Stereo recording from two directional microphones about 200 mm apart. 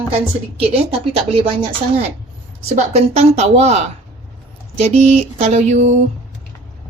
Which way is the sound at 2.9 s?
30° right (ahead or behind).